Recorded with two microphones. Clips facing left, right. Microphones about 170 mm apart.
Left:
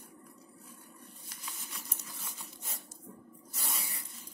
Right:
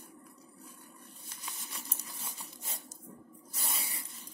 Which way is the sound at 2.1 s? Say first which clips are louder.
Right 1 dB; 30° right (ahead or behind).